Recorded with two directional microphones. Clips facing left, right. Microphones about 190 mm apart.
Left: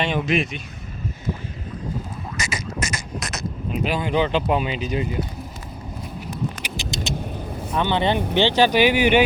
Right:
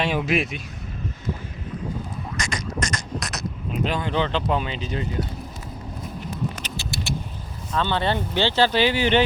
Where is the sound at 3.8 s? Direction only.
10° left (ahead or behind).